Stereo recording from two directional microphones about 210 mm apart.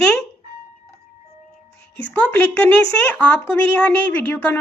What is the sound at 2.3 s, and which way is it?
A woman's voice, 10° left (ahead or behind).